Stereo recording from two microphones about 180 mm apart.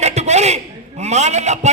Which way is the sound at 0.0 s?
40° right (ahead or behind).